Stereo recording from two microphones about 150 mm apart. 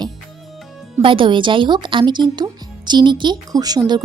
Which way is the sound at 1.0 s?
35° right (ahead or behind).